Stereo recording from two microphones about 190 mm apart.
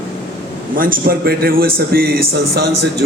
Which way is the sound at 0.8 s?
45° right (ahead or behind).